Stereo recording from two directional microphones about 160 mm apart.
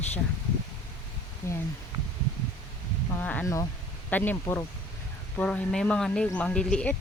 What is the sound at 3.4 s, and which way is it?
Speech, 20° left (ahead or behind).